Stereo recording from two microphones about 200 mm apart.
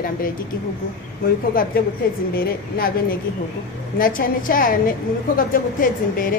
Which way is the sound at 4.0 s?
45° left (ahead or behind).